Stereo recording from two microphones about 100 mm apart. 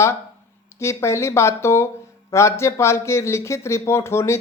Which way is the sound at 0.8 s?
30° left (ahead or behind).